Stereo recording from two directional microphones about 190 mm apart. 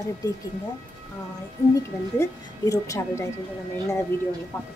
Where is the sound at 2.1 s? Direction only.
15° left (ahead or behind).